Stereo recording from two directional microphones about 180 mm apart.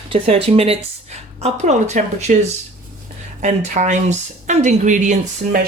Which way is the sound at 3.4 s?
40° right (ahead or behind).